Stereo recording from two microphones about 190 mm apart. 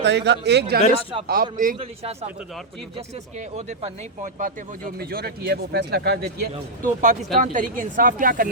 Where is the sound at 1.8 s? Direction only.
30° right (ahead or behind).